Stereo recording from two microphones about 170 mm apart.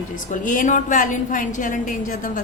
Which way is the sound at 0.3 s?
50° left (ahead or behind).